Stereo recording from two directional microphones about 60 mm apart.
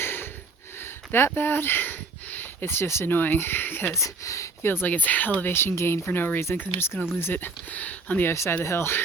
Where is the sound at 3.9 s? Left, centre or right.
Left.